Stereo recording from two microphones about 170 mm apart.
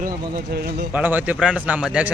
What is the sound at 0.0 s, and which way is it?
Speech, 60° right (ahead or behind).